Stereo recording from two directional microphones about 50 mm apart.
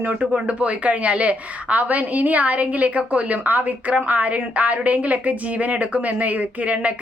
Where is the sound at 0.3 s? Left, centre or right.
Right.